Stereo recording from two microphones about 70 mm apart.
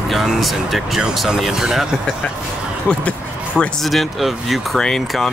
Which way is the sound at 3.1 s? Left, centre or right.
Centre.